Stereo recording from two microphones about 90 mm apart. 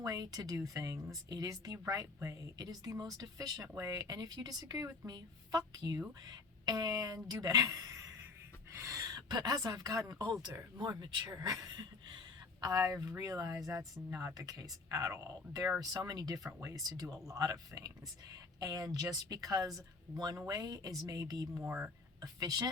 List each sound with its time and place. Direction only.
0.0 s speech: 45° right (ahead or behind)
10.8 s speech: 55° right (ahead or behind)
12.6 s speech: 40° right (ahead or behind)
14.1 s speech: 30° right (ahead or behind)
14.3 s speech: 45° right (ahead or behind)
21.7 s speech: 10° right (ahead or behind)
22.2 s speech: 45° right (ahead or behind)